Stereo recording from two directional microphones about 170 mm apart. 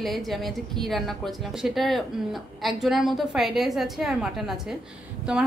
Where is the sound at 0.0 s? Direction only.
Centre (ahead or behind).